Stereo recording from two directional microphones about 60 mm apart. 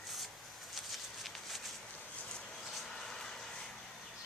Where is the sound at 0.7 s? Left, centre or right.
Centre.